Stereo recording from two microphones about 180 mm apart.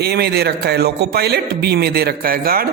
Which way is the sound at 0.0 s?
65° right (ahead or behind).